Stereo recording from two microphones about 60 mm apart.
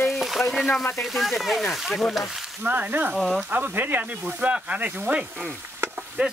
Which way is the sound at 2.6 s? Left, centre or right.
Right.